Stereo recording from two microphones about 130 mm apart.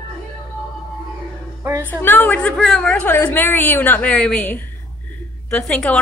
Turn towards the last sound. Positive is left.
turn(degrees=5)  # may be behind; listen again after turning